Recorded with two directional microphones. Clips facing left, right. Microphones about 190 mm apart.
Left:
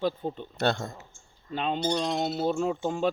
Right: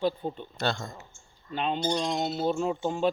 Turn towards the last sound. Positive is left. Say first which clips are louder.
# even
turn(degrees=45)  # may be behind; listen again after turning